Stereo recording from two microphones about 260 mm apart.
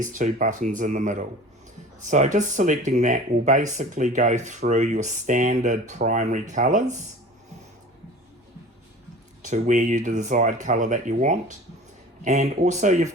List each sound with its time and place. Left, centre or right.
0.0 s speech: right
9.4 s speech: right